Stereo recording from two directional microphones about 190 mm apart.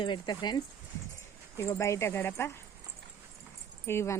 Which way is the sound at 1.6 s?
15° left (ahead or behind).